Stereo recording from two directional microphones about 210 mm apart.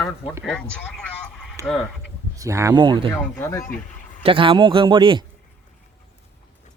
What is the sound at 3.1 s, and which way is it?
Speech, 10° left (ahead or behind).